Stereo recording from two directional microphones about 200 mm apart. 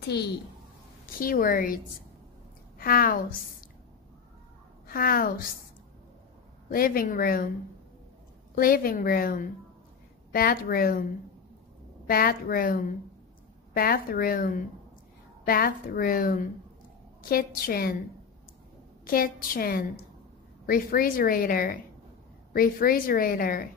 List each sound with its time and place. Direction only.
0.1 s a child's voice: 55° left (ahead or behind)
2.8 s a woman's voice: 45° left (ahead or behind)
4.8 s a woman's voice: 45° left (ahead or behind)
6.7 s a woman's voice: 45° left (ahead or behind)
8.5 s a woman's voice: 45° left (ahead or behind)
12.1 s a woman's voice: 45° left (ahead or behind)
13.7 s a woman's voice: 50° left (ahead or behind)
19.0 s a woman's voice: 45° left (ahead or behind)